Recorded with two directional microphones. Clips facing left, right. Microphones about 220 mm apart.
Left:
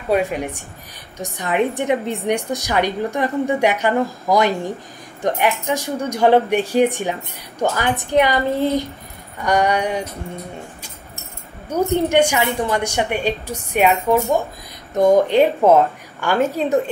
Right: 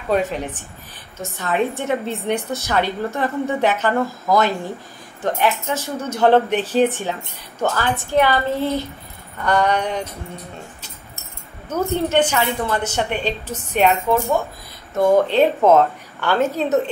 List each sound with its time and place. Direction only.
0.1 s a woman's voice: 10° left (ahead or behind)
11.7 s a woman's voice: 15° left (ahead or behind)